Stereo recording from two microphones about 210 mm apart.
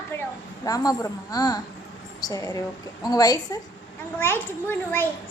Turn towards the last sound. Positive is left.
turn(degrees=10)  # may be behind; listen again after turning